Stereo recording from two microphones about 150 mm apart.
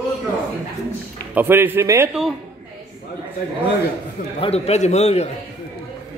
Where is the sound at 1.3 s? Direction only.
15° right (ahead or behind).